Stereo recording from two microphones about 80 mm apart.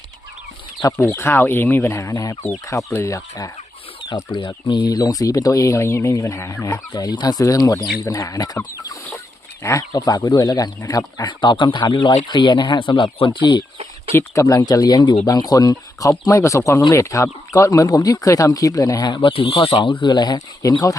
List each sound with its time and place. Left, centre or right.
1.1 s speech: left
1.9 s speech: left
4.0 s speech: left
4.9 s speech: left
9.6 s speech: left
11.2 s speech: left
14.3 s speech: left
19.1 s speech: left
19.8 s speech: left
20.6 s speech: left